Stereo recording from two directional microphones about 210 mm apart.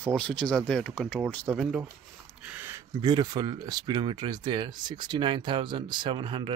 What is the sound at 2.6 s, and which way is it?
Speech, 20° right (ahead or behind).